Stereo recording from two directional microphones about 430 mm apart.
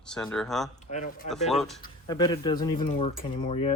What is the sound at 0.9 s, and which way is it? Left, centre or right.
Speech, centre.